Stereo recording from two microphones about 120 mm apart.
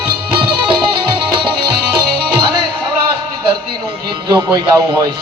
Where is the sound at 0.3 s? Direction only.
45° right (ahead or behind).